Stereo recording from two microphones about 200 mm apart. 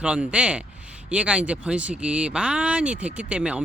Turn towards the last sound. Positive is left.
turn(degrees=-5)  # may be behind; listen again after turning